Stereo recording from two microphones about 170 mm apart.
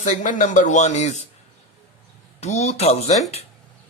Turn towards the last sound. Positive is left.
turn(degrees=40)  # may be behind; listen again after turning